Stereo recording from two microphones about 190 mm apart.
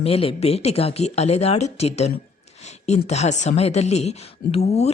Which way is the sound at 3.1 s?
35° left (ahead or behind).